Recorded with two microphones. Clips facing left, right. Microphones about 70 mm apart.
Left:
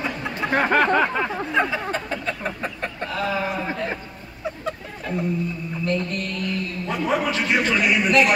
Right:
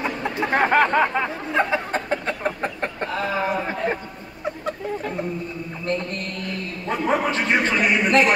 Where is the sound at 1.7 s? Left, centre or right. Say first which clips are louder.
Right 3 dB; right.